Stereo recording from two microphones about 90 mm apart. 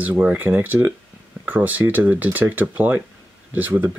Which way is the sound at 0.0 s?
15° right (ahead or behind).